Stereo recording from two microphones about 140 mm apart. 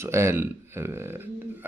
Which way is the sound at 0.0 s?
20° right (ahead or behind).